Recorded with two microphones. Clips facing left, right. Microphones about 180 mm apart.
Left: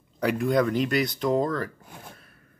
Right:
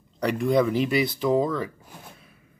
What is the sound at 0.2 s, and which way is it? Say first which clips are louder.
Speech: right 1 dB; centre (ahead or behind).